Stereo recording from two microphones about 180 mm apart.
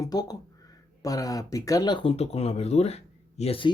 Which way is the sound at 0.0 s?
20° left (ahead or behind).